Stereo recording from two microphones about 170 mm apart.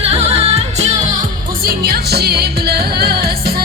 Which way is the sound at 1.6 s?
60° right (ahead or behind).